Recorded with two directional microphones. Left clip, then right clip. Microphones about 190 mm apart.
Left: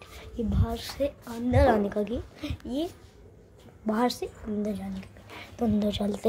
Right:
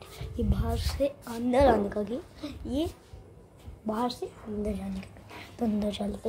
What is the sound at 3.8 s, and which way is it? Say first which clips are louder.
Speech: left 4 dB; 25° left (ahead or behind).